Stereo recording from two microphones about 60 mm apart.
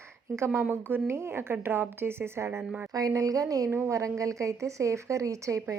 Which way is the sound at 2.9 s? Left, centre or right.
Right.